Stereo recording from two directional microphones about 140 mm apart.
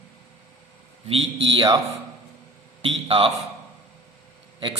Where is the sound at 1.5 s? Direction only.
30° right (ahead or behind).